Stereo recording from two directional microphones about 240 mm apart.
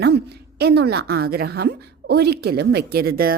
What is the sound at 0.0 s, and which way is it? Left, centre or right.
A woman's voice, right.